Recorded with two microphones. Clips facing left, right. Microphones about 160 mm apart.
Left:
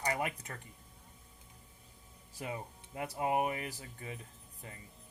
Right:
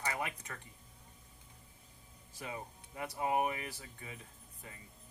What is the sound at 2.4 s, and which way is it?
Speech, 35° left (ahead or behind).